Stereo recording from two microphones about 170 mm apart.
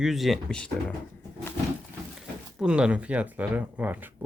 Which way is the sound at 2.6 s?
5° right (ahead or behind).